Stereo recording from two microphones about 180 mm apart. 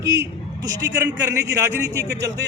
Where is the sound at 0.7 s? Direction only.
20° right (ahead or behind).